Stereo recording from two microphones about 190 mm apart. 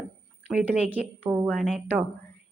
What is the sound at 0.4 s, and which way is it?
A woman's voice, 5° right (ahead or behind).